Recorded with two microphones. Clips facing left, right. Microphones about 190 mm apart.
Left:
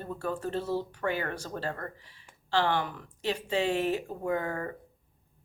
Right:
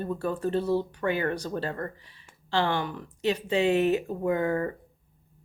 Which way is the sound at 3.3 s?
20° right (ahead or behind).